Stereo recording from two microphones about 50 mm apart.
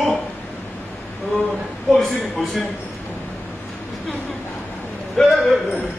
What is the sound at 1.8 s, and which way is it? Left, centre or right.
Speech, centre.